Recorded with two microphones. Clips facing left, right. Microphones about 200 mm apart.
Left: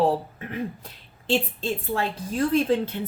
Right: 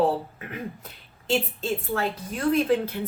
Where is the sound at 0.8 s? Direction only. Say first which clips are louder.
Left 2 dB; 30° left (ahead or behind).